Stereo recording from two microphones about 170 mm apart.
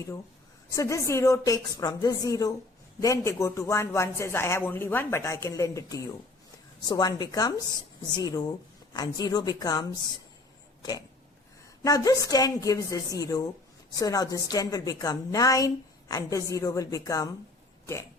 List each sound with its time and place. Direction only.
0.7 s a woman's voice: 20° left (ahead or behind)
11.8 s a woman's voice: 20° left (ahead or behind)